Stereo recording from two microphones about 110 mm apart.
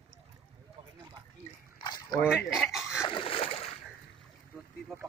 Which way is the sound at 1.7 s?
40° left (ahead or behind).